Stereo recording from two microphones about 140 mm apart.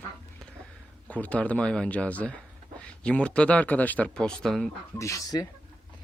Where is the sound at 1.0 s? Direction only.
10° left (ahead or behind).